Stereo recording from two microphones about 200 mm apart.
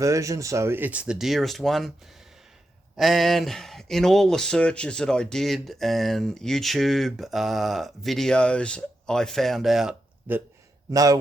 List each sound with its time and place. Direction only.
0.0 s speech: 15° right (ahead or behind); by 1.9 s centre (ahead or behind)
3.0 s speech: centre (ahead or behind)
10.9 s speech: 15° right (ahead or behind)